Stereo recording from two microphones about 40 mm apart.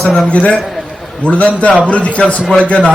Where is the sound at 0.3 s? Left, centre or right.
Left.